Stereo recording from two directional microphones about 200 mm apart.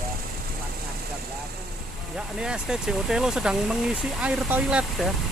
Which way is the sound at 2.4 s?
5° right (ahead or behind).